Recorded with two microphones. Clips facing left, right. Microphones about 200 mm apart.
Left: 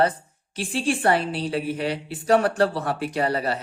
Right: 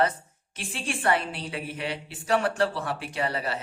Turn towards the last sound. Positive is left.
turn(degrees=40)  # may be behind; listen again after turning